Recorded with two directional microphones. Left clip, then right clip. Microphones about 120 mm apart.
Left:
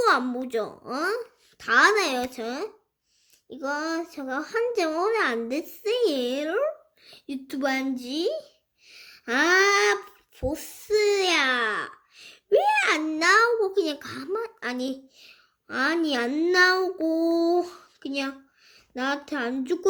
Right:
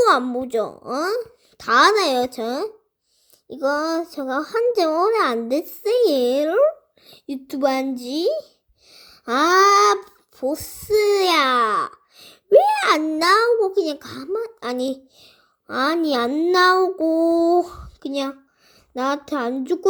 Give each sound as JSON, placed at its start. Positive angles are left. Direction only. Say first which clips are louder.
{"t": 0.0, "sound": "a woman's voice", "louder": "right 5 dB", "side_deg": -25}
{"t": 8.9, "sound": "a sound", "louder": "right 4 dB", "side_deg": -30}
{"t": 10.5, "sound": "a child's voice", "louder": "right 5 dB", "side_deg": -30}
{"t": 13.1, "sound": "a woman's voice", "louder": "right 2 dB", "side_deg": -30}